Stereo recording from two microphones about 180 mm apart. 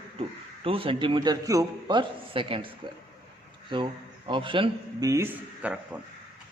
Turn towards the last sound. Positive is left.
turn(degrees=-5)  # may be behind; listen again after turning